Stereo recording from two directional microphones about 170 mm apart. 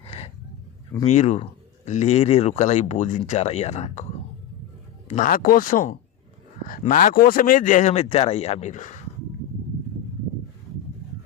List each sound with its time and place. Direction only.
0.0 s a sound: 35° left (ahead or behind)
1.0 s speech: 45° left (ahead or behind)
5.0 s a man's voice: 50° left (ahead or behind)